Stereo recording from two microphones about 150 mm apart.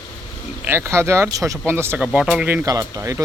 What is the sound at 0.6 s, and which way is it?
A man's voice, 15° right (ahead or behind).